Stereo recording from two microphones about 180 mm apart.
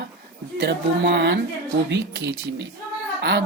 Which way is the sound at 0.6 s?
70° right (ahead or behind).